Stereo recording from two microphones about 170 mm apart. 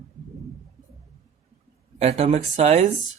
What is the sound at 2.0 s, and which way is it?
Speech, 35° right (ahead or behind).